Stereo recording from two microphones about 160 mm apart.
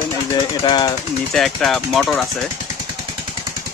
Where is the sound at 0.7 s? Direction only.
30° left (ahead or behind).